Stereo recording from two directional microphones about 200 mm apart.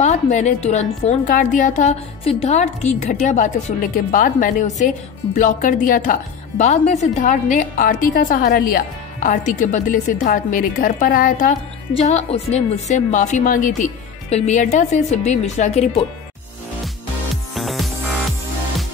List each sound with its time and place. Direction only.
0.0 s a woman's voice: 35° left (ahead or behind)
12.0 s a woman's voice: 35° left (ahead or behind)
17.6 s music: centre (ahead or behind)